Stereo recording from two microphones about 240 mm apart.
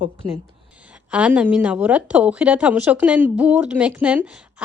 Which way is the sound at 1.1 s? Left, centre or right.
Centre.